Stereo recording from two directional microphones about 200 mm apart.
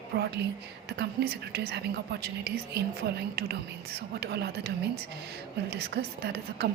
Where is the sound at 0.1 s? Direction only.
50° right (ahead or behind).